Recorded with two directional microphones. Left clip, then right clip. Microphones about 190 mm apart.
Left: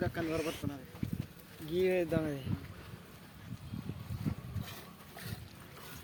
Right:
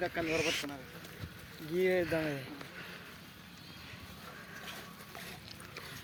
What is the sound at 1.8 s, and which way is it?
Speech, 40° left (ahead or behind).